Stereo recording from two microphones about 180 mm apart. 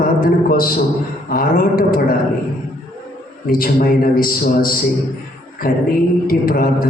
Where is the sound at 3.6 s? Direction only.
55° left (ahead or behind).